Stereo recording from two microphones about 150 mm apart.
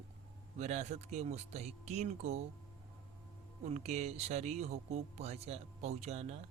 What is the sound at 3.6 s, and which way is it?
Speech, 50° right (ahead or behind).